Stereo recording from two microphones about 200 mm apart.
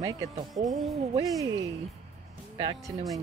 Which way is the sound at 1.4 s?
20° right (ahead or behind).